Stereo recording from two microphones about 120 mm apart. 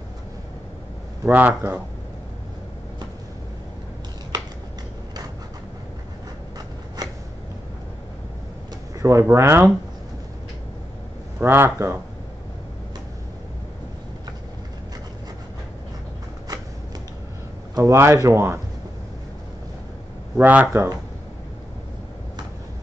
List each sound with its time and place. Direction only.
1.2 s speech: 15° right (ahead or behind)
7.0 s a sound: 35° right (ahead or behind)
9.0 s speech: 25° right (ahead or behind)
11.3 s speech: 20° right (ahead or behind)
17.7 s speech: 25° right (ahead or behind)
20.3 s speech: 15° right (ahead or behind)
20.6 s speech: 25° right (ahead or behind)